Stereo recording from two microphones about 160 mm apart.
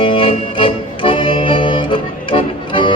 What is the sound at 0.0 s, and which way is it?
Music, 35° left (ahead or behind).